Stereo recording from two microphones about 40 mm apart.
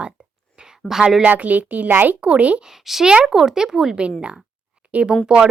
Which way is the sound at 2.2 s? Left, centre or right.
Right.